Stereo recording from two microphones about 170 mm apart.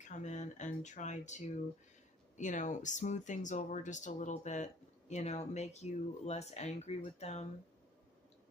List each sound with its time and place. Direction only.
0.1 s speech: 45° left (ahead or behind)